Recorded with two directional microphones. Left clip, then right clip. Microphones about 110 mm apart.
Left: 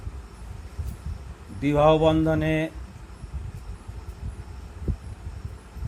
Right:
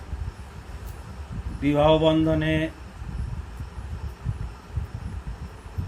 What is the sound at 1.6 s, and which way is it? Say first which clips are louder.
Mantra: even; 60° left (ahead or behind).